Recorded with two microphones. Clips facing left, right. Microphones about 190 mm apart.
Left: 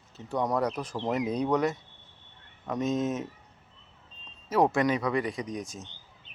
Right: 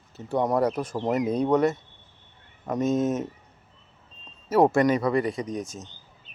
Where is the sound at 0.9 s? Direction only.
5° right (ahead or behind).